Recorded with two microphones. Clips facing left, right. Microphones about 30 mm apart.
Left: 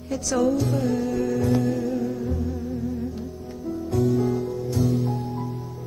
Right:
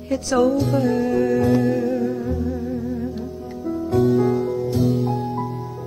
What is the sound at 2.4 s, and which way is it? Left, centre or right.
Music, right.